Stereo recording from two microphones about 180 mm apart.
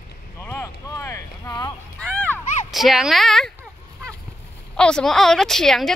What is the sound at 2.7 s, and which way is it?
Speech, centre (ahead or behind).